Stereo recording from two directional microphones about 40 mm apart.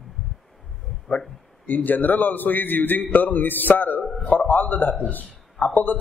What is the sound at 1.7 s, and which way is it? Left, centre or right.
A man's voice, left.